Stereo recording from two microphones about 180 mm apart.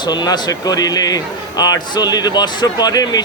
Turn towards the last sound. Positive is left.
turn(degrees=20)  # may be behind; listen again after turning